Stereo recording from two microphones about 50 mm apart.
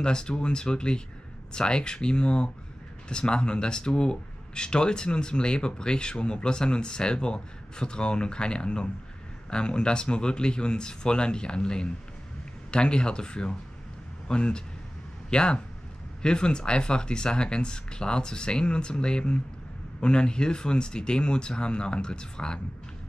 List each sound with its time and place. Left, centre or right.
0.0 s speech: centre